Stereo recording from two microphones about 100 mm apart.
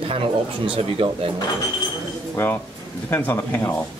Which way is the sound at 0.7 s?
65° right (ahead or behind).